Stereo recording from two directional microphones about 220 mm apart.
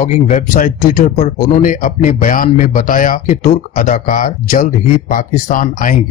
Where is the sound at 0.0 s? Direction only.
35° left (ahead or behind).